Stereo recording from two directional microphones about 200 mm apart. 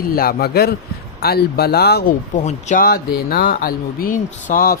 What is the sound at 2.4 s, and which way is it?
A man's voice, 35° left (ahead or behind).